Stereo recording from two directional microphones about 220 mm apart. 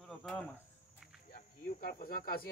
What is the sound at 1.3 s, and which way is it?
Speech, 40° left (ahead or behind).